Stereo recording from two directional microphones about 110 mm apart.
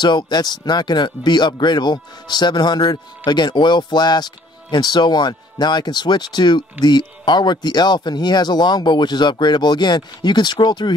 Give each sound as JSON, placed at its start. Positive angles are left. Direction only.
{"t": 0.0, "sound": "speech", "side_deg": 45}